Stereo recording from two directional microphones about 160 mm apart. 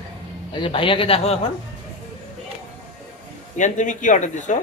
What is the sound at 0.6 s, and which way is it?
Speech, 30° left (ahead or behind).